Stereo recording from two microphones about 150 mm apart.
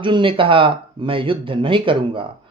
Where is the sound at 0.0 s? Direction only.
35° right (ahead or behind).